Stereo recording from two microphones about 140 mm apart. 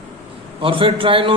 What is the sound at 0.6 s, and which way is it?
Speech, 40° right (ahead or behind).